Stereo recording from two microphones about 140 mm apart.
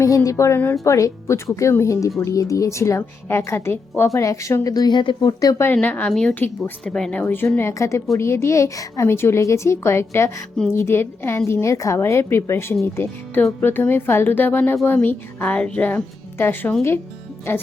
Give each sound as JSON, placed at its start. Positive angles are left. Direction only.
{"t": 0.3, "sound": "speech", "side_deg": 20}
{"t": 5.7, "sound": "a woman's voice", "side_deg": 10}